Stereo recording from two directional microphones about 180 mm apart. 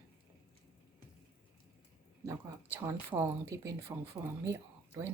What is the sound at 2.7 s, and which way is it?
A woman's voice, 15° right (ahead or behind).